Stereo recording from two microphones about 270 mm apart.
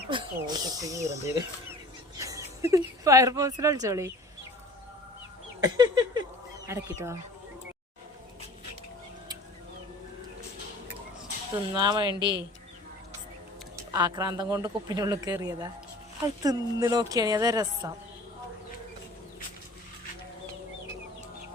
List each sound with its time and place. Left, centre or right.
0.1 s speech: centre
5.5 s a sound: centre
6.7 s speech: centre
11.7 s speech: centre
13.9 s speech: centre